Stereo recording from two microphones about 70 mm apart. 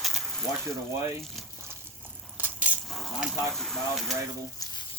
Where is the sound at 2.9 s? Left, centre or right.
Centre.